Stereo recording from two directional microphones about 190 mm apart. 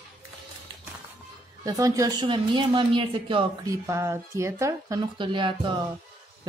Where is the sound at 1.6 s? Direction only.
15° right (ahead or behind).